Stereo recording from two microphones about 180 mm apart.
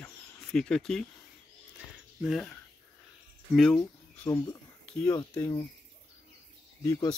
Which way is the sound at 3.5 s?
Centre (ahead or behind).